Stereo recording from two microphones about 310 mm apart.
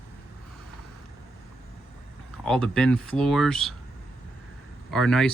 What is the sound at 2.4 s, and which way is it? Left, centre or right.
Speech, centre.